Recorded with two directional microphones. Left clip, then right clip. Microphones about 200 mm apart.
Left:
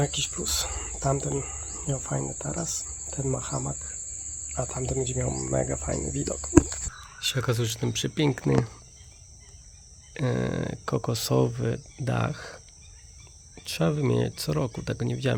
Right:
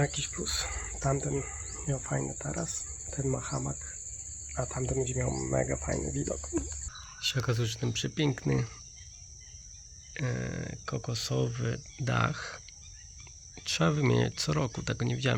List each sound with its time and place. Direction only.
0.0 s speech: 15° left (ahead or behind)
10.2 s speech: 30° left (ahead or behind)
13.7 s speech: 10° left (ahead or behind)